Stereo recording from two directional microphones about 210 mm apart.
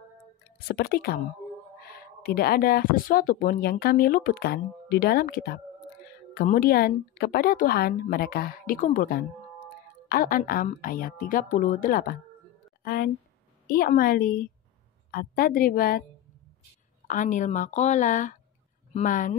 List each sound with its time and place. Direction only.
0.4 s a woman's voice: 45° left (ahead or behind)
17.1 s a woman's voice: 35° left (ahead or behind)